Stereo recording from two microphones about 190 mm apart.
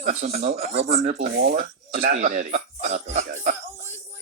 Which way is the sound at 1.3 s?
50° right (ahead or behind).